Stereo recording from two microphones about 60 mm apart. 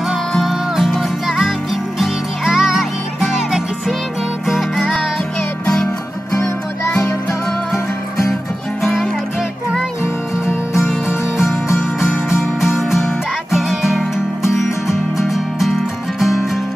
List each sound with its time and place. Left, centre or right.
0.3 s music: centre
8.8 s music: centre
12.5 s music: centre